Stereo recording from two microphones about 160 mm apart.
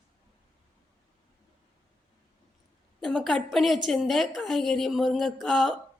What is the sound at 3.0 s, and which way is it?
A woman's voice, centre (ahead or behind).